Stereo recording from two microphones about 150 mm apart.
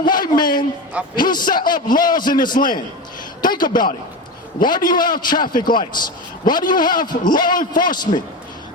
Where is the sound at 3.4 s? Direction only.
65° left (ahead or behind).